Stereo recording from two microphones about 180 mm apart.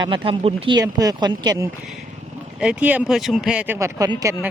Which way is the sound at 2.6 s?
5° right (ahead or behind).